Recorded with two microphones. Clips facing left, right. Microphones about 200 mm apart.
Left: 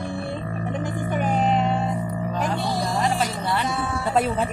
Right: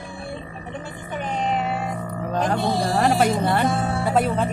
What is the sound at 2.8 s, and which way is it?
Music, 65° right (ahead or behind).